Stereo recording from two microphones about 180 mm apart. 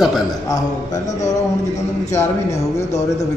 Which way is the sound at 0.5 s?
40° left (ahead or behind).